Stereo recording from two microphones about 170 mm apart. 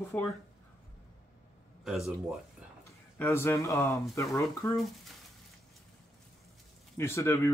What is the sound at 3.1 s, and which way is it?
Speech, 15° left (ahead or behind).